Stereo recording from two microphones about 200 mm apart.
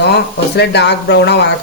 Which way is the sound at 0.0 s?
55° left (ahead or behind).